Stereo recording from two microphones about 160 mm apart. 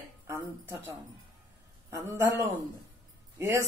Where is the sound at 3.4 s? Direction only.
20° right (ahead or behind).